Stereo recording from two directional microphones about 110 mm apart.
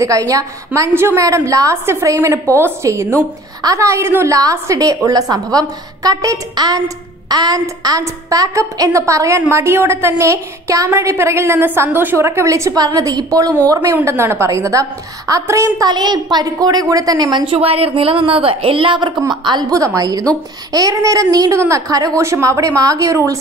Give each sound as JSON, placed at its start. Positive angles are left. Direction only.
{"t": 0.0, "sound": "a woman's voice", "side_deg": -30}
{"t": 17.6, "sound": "speech", "side_deg": -60}